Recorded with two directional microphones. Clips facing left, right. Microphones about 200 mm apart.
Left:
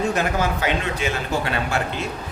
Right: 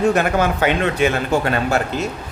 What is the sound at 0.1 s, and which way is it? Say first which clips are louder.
Speech: right 5 dB; 60° right (ahead or behind).